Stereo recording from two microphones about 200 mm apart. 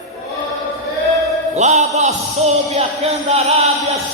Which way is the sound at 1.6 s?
35° right (ahead or behind).